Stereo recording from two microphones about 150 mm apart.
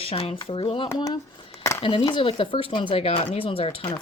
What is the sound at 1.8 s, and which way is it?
Speech, 35° left (ahead or behind).